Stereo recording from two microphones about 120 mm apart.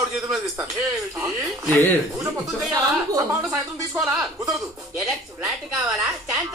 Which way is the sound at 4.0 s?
10° right (ahead or behind).